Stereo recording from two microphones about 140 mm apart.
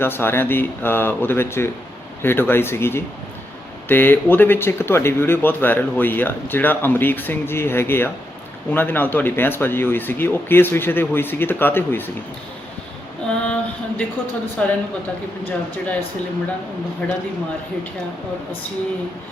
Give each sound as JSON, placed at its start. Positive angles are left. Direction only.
{"t": 0.0, "sound": "speech", "side_deg": 15}
{"t": 13.2, "sound": "a sound", "side_deg": 10}
{"t": 14.6, "sound": "speech", "side_deg": 10}
{"t": 17.0, "sound": "speech", "side_deg": 10}